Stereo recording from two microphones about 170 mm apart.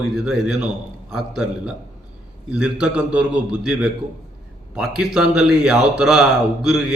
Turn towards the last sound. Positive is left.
turn(degrees=-5)  # may be behind; listen again after turning